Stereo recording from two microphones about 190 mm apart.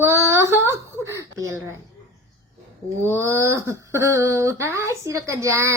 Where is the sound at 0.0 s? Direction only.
15° right (ahead or behind).